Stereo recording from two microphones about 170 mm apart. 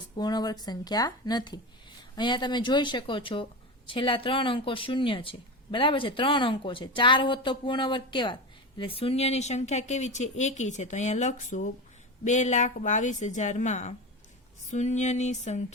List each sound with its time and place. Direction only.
0.2 s speech: 25° left (ahead or behind); by 15.6 s 40° left (ahead or behind)